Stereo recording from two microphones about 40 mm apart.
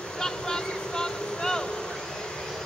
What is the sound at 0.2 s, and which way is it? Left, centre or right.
Vehicle, centre.